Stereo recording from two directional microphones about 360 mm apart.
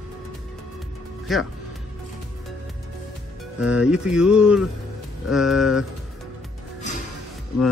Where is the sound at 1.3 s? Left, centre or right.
Centre.